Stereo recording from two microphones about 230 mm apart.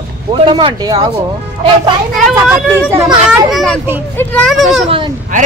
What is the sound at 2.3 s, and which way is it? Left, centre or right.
A child's voice, centre.